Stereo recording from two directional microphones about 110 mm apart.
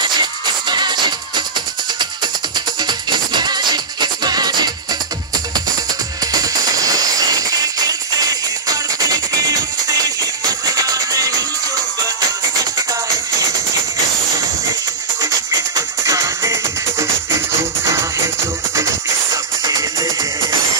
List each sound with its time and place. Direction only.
0.0 s music: 40° right (ahead or behind)
2.5 s music: 40° right (ahead or behind)
6.3 s music: 35° right (ahead or behind)
15.1 s music: 35° right (ahead or behind)
19.3 s music: 35° right (ahead or behind)